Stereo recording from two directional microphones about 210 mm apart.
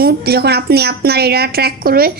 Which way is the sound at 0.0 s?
50° right (ahead or behind).